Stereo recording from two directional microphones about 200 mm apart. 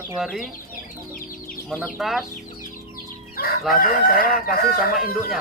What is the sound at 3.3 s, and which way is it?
Chicken, 50° left (ahead or behind).